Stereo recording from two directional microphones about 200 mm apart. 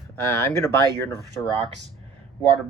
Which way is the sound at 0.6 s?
15° left (ahead or behind).